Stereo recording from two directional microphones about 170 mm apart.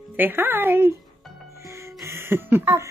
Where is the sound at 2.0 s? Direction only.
15° right (ahead or behind).